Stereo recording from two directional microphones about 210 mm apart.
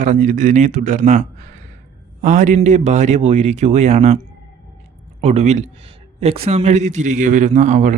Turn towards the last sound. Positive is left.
turn(degrees=-35)  # may be behind; listen again after turning